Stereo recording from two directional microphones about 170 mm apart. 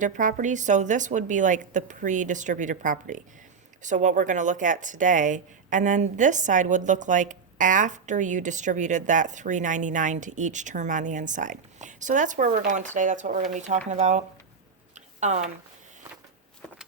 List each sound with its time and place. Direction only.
0.0 s speech: 50° right (ahead or behind)